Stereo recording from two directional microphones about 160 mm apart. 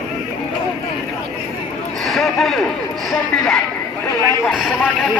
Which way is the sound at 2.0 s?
Centre (ahead or behind).